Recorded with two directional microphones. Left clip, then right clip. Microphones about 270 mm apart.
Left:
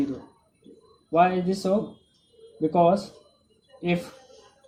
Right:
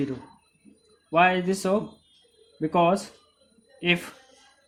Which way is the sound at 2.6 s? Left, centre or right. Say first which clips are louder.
Left 2 dB; right.